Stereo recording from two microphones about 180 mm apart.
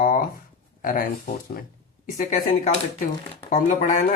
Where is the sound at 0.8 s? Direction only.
50° left (ahead or behind).